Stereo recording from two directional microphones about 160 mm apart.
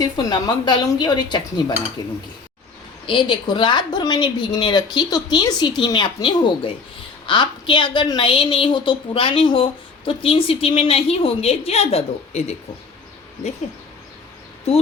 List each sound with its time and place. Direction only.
0.0 s a woman's voice: 25° left (ahead or behind)
3.1 s a woman's voice: 30° left (ahead or behind)